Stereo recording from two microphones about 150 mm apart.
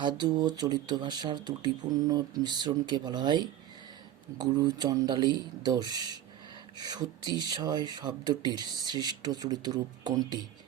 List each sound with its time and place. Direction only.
0.0 s speech: 30° right (ahead or behind)